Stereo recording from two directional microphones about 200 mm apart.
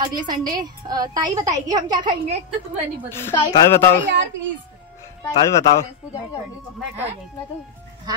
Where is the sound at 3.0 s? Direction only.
10° left (ahead or behind).